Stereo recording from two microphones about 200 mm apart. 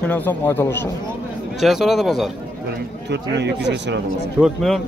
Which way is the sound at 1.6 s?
Centre (ahead or behind).